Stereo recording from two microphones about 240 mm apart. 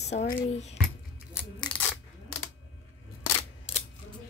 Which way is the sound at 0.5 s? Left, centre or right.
Left.